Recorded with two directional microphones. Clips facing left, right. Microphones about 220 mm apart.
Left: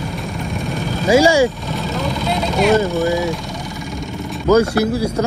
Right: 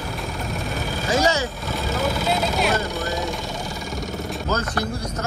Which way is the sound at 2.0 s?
5° right (ahead or behind).